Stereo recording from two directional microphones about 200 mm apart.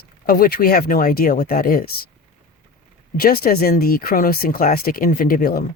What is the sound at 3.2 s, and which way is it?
Speech, 50° left (ahead or behind).